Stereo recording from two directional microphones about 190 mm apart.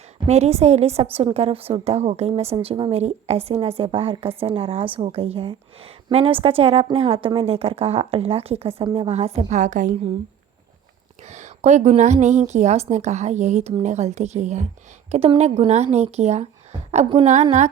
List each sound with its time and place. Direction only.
0.3 s a woman's voice: 35° right (ahead or behind)
11.2 s a woman's voice: 35° right (ahead or behind)